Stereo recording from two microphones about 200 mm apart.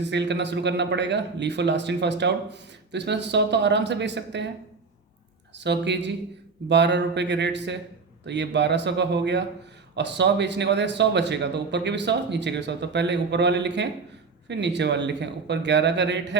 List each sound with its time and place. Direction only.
0.0 s a man's voice: 60° right (ahead or behind)
5.5 s a man's voice: 60° right (ahead or behind)